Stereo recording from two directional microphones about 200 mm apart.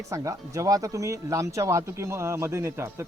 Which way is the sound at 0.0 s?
15° right (ahead or behind).